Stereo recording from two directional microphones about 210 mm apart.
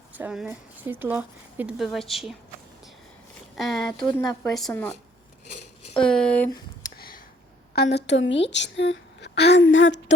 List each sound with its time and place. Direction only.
0.2 s speech: 5° right (ahead or behind)
3.6 s speech: centre (ahead or behind)
5.9 s speech: 5° left (ahead or behind)
6.9 s a sound: 45° left (ahead or behind)
7.7 s a woman's voice: 50° left (ahead or behind)
9.7 s a sound: 60° left (ahead or behind)